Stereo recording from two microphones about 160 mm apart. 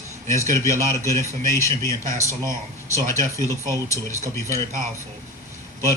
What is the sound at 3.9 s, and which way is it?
Speech, 20° left (ahead or behind).